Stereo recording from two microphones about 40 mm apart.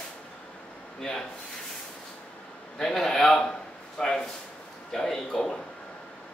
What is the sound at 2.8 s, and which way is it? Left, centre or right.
A man's voice, centre.